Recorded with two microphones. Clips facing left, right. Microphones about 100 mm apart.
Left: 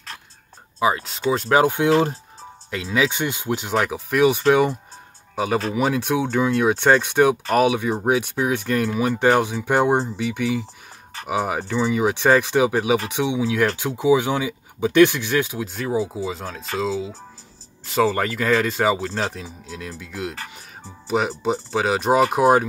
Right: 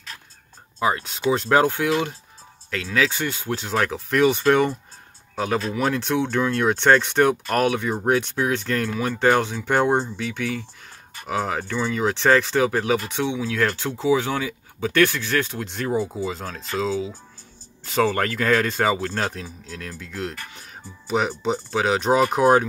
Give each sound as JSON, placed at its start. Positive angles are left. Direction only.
{"t": 0.7, "sound": "speech", "side_deg": 5}
{"t": 1.9, "sound": "speech", "side_deg": 35}
{"t": 2.7, "sound": "speech", "side_deg": 15}